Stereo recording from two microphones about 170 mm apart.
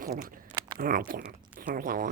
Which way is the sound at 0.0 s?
60° right (ahead or behind).